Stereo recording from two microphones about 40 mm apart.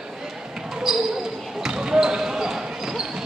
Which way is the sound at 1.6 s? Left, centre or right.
Centre.